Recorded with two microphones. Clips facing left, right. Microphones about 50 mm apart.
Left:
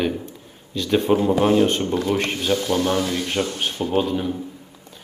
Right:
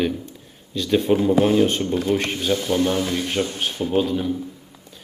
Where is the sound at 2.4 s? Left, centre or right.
Centre.